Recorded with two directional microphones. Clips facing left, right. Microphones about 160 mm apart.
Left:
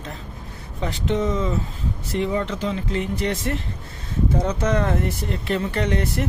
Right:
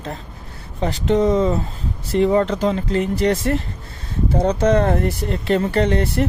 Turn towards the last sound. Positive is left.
turn(degrees=-35)  # may be behind; listen again after turning